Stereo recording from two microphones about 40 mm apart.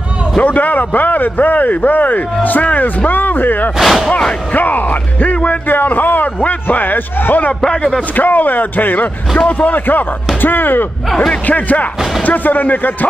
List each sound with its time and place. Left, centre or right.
0.4 s a man's voice: left
3.8 s speech: centre
4.2 s a man's voice: left
4.6 s speech: left
5.7 s a man's voice: left
7.6 s a man's voice: centre
8.2 s a man's voice: left
11.4 s a man's voice: left